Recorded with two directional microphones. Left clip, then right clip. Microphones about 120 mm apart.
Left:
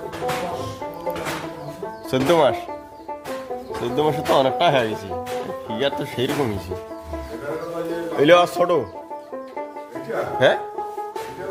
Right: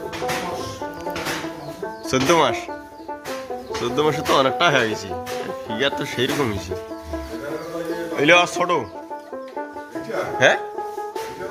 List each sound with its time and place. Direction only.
2.0 s speech: 20° left (ahead or behind)
3.8 s speech: 20° left (ahead or behind)
8.1 s a man's voice: 30° left (ahead or behind)
10.3 s speech: 20° left (ahead or behind)